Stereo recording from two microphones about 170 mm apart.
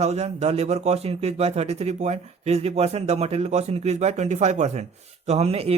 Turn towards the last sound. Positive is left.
turn(degrees=-35)  # may be behind; listen again after turning